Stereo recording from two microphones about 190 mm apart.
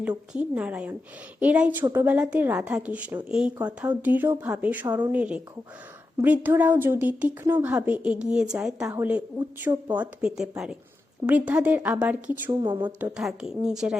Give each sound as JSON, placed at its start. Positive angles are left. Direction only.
{"t": 0.3, "sound": "a woman's voice", "side_deg": -5}
{"t": 12.5, "sound": "a woman's voice", "side_deg": -25}
{"t": 13.0, "sound": "speech", "side_deg": -5}